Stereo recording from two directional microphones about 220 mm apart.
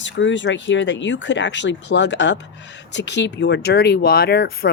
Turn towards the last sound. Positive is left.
turn(degrees=45)  # may be behind; listen again after turning